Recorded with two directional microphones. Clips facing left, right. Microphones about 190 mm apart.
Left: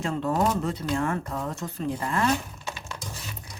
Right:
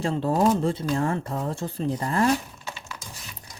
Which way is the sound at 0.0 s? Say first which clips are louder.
Right 3 dB; 30° right (ahead or behind).